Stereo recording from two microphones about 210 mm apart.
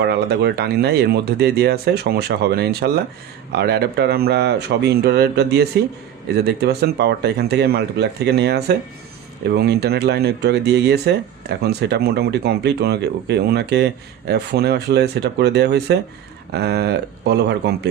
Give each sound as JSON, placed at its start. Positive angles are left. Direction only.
{"t": 0.0, "sound": "speech", "side_deg": -50}